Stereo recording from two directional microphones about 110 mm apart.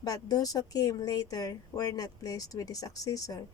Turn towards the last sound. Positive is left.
turn(degrees=35)  # may be behind; listen again after turning